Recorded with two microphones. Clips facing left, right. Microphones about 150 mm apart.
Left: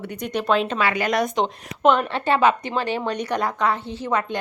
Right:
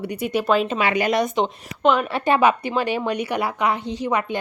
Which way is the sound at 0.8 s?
15° right (ahead or behind).